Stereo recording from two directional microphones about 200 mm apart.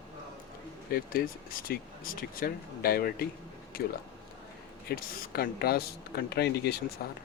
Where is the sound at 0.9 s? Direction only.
45° left (ahead or behind).